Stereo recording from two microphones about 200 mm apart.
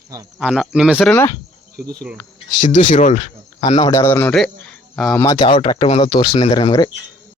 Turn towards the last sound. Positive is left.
turn(degrees=20)  # may be behind; listen again after turning